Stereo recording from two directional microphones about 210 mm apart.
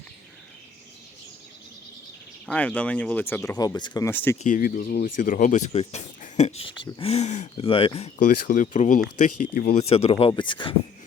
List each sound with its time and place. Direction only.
2.5 s speech: 5° left (ahead or behind)
3.6 s speech: 20° left (ahead or behind)
4.4 s speech: 40° left (ahead or behind)
9.9 s speech: 30° left (ahead or behind)